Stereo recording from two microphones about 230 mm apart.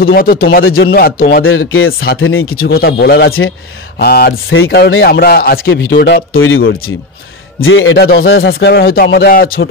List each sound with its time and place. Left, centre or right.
0.0 s speech: left
1.4 s speech: left
2.7 s speech: left
6.3 s speech: left